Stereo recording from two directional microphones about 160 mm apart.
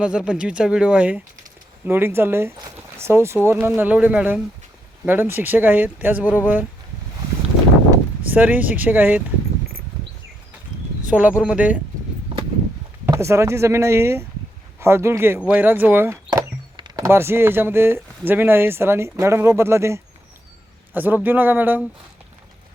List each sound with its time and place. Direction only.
0.0 s speech: 5° right (ahead or behind)
7.9 s speech: 10° right (ahead or behind)
11.1 s speech: 5° right (ahead or behind)
13.1 s speech: 15° right (ahead or behind)
16.3 s a sound: 25° right (ahead or behind)
18.3 s speech: 15° right (ahead or behind)